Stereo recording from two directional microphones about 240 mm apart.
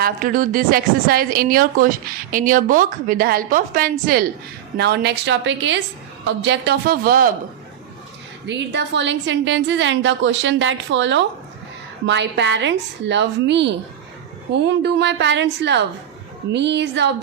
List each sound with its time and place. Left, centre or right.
0.0 s a woman's voice: right
8.4 s a woman's voice: right